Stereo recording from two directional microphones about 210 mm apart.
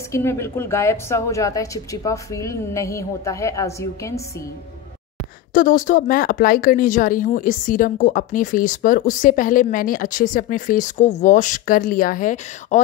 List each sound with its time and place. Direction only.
0.1 s a woman's voice: 10° left (ahead or behind)
5.5 s speech: 40° left (ahead or behind)